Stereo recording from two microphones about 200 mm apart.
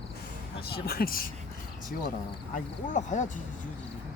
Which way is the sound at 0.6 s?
50° left (ahead or behind).